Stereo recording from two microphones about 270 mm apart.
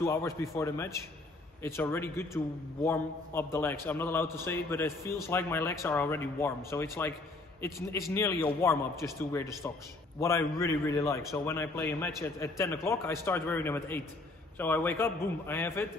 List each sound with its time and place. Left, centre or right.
0.0 s a man's voice: centre